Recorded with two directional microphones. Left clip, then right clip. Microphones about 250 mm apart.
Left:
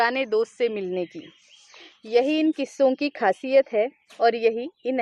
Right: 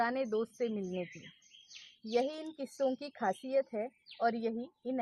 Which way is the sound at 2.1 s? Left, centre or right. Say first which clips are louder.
Left 14 dB; left.